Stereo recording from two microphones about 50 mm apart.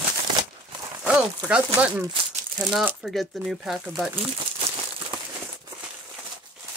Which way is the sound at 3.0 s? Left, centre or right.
Centre.